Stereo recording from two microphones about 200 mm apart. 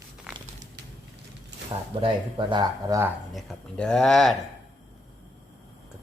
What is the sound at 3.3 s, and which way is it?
Speech, centre (ahead or behind).